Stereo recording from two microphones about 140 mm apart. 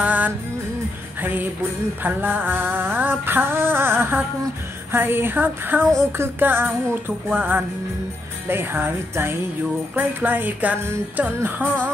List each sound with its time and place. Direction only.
0.0 s music: 10° right (ahead or behind)